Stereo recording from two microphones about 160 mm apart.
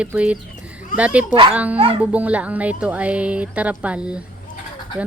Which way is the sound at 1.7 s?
35° right (ahead or behind).